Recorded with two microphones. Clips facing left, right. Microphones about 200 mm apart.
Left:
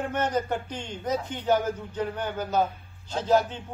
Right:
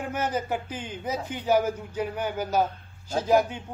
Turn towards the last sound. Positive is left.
turn(degrees=-10)  # may be behind; listen again after turning